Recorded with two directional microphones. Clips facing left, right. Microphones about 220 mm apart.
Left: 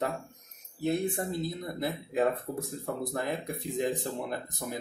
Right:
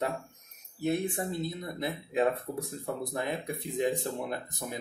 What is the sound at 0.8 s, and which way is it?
Speech, 5° right (ahead or behind).